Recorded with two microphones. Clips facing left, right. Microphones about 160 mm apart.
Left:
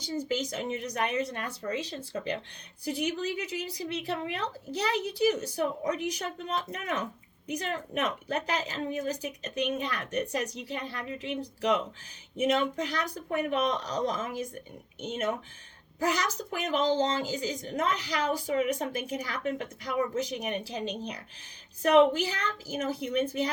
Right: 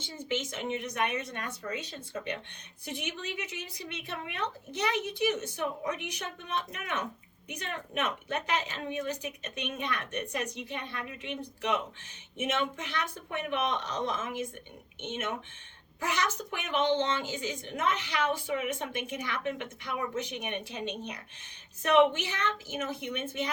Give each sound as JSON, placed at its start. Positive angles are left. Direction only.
{"t": 0.0, "sound": "a woman's voice", "side_deg": 40}